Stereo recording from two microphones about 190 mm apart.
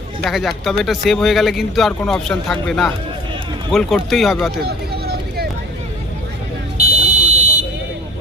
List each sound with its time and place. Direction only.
0.3 s a man's voice: centre (ahead or behind)
4.6 s a sound: 55° right (ahead or behind)
6.7 s buzzer: 40° right (ahead or behind)